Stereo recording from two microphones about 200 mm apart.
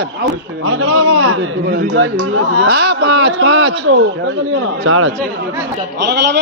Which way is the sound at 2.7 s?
55° right (ahead or behind).